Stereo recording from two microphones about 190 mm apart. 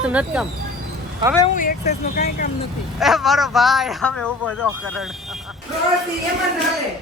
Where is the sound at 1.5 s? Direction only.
45° left (ahead or behind).